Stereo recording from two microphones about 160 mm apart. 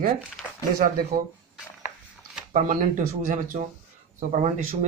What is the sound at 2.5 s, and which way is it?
Speech, 50° right (ahead or behind).